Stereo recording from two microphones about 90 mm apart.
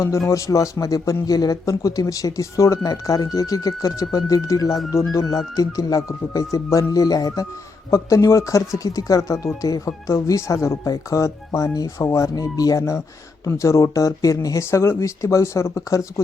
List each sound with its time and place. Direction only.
0.3 s speech: 35° left (ahead or behind)